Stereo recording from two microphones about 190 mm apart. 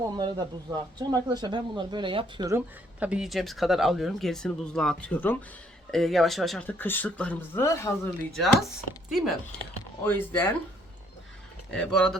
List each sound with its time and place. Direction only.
0.0 s speech: 20° right (ahead or behind)
2.6 s speech: 5° right (ahead or behind); by 8.1 s 15° left (ahead or behind)
8.4 s speech: centre (ahead or behind)
10.0 s speech: 10° left (ahead or behind)
11.7 s speech: 5° left (ahead or behind)